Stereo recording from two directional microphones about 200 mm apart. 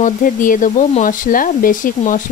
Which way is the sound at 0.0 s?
40° left (ahead or behind).